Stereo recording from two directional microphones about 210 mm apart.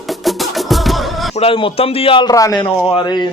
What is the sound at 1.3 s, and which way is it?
A man's voice, 25° left (ahead or behind).